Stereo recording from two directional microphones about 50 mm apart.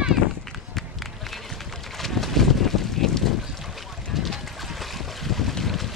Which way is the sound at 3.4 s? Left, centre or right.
Centre.